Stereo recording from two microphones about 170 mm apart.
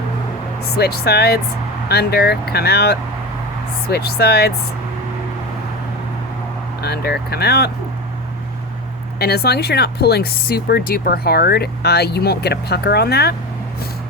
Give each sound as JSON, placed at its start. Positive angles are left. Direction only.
{"t": 0.8, "sound": "speech", "side_deg": 70}
{"t": 6.8, "sound": "speech", "side_deg": 70}
{"t": 9.1, "sound": "speech", "side_deg": 70}